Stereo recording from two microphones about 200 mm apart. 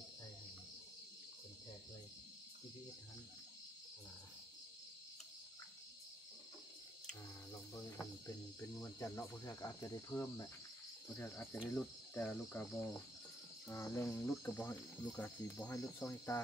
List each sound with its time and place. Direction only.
8.5 s cricket: 15° left (ahead or behind)
13.7 s cricket: 15° left (ahead or behind)